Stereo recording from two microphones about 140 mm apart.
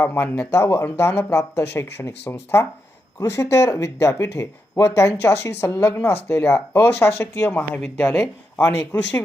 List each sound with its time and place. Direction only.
0.0 s speech: 15° left (ahead or behind)